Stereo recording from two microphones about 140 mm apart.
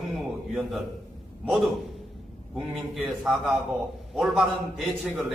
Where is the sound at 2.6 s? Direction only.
Centre (ahead or behind).